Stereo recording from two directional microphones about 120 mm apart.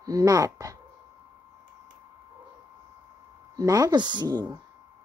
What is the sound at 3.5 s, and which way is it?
Speech, 30° right (ahead or behind).